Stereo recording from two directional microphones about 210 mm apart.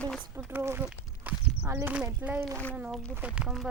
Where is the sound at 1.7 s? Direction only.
15° right (ahead or behind).